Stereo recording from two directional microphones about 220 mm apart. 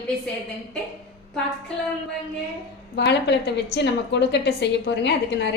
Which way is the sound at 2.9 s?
50° left (ahead or behind).